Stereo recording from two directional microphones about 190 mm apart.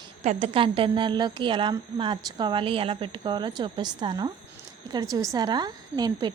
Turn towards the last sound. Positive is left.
turn(degrees=-20)  # may be behind; listen again after turning